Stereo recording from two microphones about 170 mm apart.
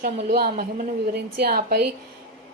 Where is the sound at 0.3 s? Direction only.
55° right (ahead or behind).